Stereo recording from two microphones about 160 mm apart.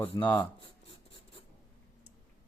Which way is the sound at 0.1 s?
20° left (ahead or behind).